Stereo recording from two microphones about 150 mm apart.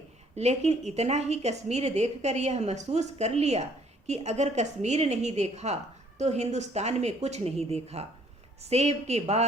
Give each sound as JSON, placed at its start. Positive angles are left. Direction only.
{"t": 0.3, "sound": "a woman's voice", "side_deg": -45}